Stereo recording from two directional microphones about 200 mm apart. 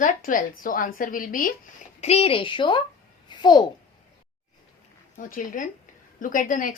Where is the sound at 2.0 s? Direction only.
30° left (ahead or behind).